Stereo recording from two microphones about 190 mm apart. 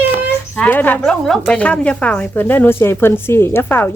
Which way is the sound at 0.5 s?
10° left (ahead or behind).